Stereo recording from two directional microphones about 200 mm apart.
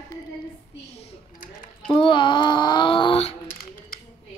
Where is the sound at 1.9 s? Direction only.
25° left (ahead or behind).